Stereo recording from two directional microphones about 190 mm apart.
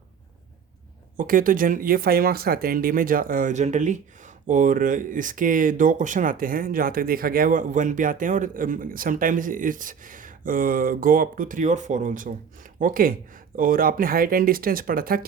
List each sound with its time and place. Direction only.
1.1 s speech: 45° right (ahead or behind)